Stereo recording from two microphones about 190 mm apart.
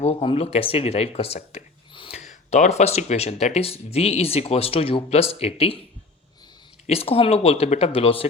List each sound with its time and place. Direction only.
0.0 s speech: 30° left (ahead or behind)
6.8 s speech: 30° left (ahead or behind)